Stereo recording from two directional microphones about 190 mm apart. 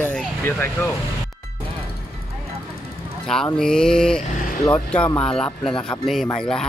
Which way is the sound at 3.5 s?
5° left (ahead or behind).